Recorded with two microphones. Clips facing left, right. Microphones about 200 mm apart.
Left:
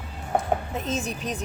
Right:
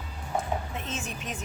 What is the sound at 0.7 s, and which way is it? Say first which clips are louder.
Speech: left 7 dB; 35° left (ahead or behind).